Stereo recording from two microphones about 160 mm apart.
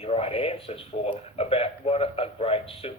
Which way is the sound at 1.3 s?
35° left (ahead or behind).